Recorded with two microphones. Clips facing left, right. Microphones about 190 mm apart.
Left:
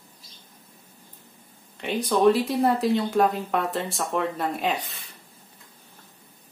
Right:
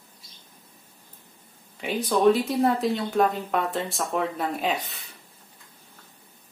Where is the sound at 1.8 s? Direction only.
Centre (ahead or behind).